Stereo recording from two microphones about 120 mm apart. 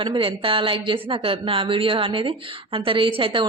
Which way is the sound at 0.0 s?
45° right (ahead or behind).